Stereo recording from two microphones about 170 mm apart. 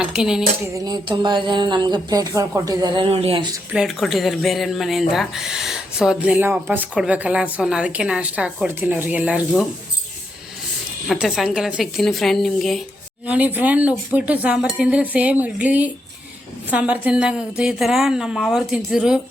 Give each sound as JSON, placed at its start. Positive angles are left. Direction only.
{"t": 0.0, "sound": "speech", "side_deg": -5}
{"t": 0.7, "sound": "speech", "side_deg": -25}
{"t": 3.7, "sound": "speech", "side_deg": 0}
{"t": 8.6, "sound": "cutlery", "side_deg": -10}
{"t": 11.1, "sound": "speech", "side_deg": 0}
{"t": 13.2, "sound": "cutlery", "side_deg": -10}
{"t": 16.7, "sound": "speech", "side_deg": -10}